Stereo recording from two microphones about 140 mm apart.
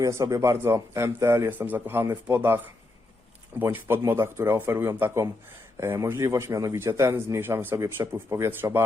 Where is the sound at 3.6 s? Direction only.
15° right (ahead or behind).